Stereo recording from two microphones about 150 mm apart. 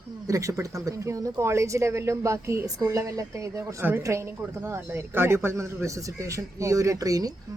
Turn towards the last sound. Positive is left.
turn(degrees=-25)  # may be behind; listen again after turning